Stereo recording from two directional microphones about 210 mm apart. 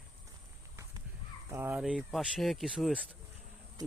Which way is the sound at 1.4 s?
10° right (ahead or behind).